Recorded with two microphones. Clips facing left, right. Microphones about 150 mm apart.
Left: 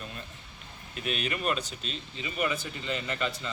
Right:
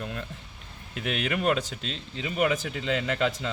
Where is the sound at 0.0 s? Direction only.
80° right.